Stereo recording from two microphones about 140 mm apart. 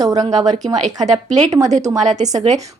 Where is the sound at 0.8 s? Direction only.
55° right (ahead or behind).